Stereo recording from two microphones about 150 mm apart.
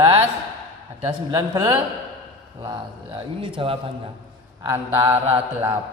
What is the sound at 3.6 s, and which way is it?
Mantra, 35° right (ahead or behind).